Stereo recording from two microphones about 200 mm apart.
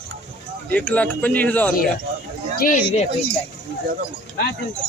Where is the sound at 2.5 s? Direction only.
40° left (ahead or behind).